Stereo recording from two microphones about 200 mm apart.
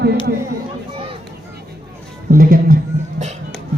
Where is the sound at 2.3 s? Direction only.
45° right (ahead or behind).